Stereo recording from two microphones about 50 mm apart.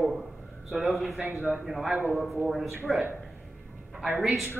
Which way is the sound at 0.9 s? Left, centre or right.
Centre.